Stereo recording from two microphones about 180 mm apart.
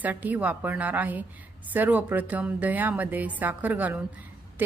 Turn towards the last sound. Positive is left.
turn(degrees=-10)  # may be behind; listen again after turning